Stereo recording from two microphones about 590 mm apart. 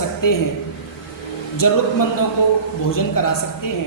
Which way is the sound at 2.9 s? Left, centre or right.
Left.